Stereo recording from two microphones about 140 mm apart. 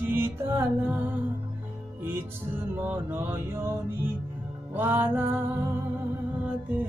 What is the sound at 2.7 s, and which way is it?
Music, 15° right (ahead or behind).